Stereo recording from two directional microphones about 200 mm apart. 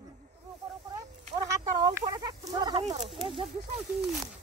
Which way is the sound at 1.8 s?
20° right (ahead or behind).